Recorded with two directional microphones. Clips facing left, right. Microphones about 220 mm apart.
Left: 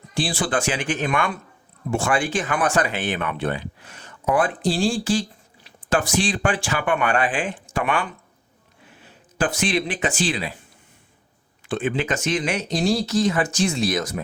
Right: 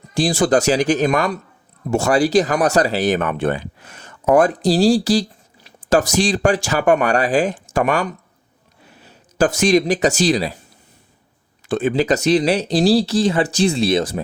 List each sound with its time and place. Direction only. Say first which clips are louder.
0.1 s speech: right 8 dB; 45° right (ahead or behind)
11.7 s speech: right 6 dB; 40° right (ahead or behind)